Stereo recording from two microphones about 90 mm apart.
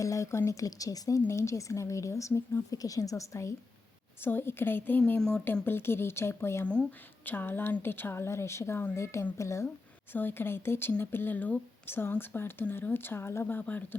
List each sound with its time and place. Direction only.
0.0 s speech: 35° left (ahead or behind)
4.2 s speech: 25° left (ahead or behind)
9.6 s speech: 20° left (ahead or behind)